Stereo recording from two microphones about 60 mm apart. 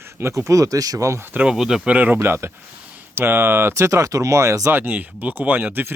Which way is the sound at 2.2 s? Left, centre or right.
Right.